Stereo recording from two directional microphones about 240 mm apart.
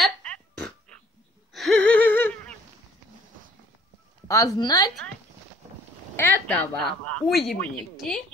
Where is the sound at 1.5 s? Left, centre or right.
Centre.